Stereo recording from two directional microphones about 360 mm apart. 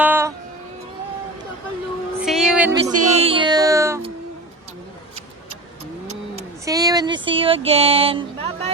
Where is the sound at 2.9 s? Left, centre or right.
Centre.